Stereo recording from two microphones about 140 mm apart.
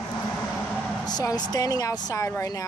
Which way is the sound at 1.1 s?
30° left (ahead or behind).